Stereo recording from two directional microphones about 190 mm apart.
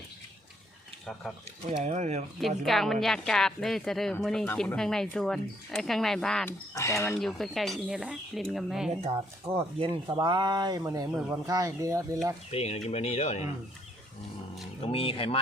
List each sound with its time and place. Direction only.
1.8 s speech: 35° right (ahead or behind)
2.6 s speech: centre (ahead or behind)
9.6 s speech: 30° right (ahead or behind)
12.5 s speech: 35° left (ahead or behind)
14.8 s speech: 30° left (ahead or behind)